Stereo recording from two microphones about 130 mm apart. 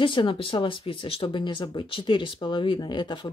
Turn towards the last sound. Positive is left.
turn(degrees=35)  # may be behind; listen again after turning